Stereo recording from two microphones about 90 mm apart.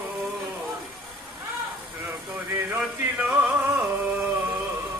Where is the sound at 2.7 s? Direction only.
15° right (ahead or behind).